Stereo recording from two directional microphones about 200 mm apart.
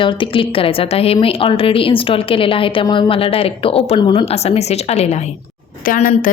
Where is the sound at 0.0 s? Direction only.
25° left (ahead or behind).